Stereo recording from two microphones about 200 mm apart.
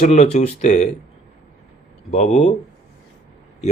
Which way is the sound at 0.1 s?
35° left (ahead or behind).